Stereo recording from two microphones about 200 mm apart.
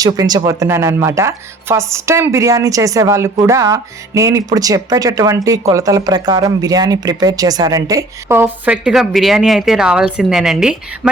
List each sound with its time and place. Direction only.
0.0 s speech: 20° right (ahead or behind)